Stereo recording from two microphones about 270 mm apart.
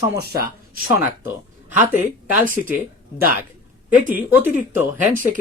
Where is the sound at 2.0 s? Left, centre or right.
Right.